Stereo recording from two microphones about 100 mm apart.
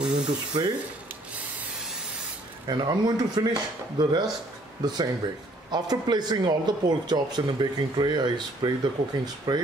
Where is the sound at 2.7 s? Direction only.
45° right (ahead or behind).